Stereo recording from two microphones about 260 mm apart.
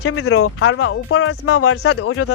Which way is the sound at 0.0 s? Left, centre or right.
Left.